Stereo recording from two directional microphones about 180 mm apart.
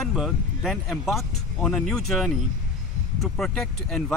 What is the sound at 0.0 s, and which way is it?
Speech, centre (ahead or behind).